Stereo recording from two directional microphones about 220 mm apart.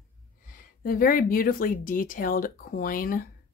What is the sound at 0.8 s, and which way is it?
Speech, 40° left (ahead or behind).